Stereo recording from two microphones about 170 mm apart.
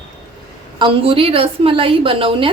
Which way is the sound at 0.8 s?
35° right (ahead or behind).